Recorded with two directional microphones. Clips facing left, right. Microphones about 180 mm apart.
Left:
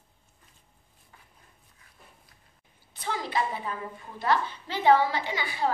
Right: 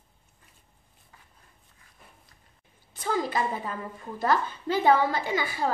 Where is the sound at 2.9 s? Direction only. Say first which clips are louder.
Right 4 dB; 45° right (ahead or behind).